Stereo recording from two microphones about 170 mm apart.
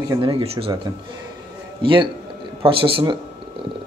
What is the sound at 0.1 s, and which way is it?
Speech, 30° right (ahead or behind).